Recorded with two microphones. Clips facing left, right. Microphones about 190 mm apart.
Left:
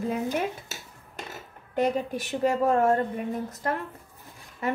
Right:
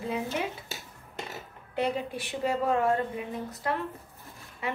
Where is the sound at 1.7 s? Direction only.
45° left (ahead or behind).